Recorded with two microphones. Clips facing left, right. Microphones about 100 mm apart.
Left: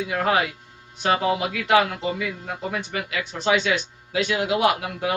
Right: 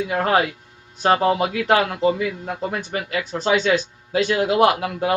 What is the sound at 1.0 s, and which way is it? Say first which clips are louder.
Speech: right 4 dB; 40° right (ahead or behind).